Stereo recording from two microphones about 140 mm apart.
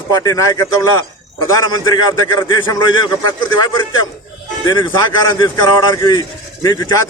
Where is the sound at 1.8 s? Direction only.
30° left (ahead or behind).